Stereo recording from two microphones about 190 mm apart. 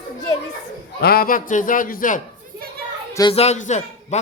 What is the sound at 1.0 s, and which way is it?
A man's voice, 50° left (ahead or behind).